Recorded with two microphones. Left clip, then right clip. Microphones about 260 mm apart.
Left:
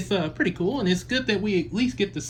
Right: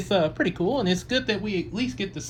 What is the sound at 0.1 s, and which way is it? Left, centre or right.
Speech, centre.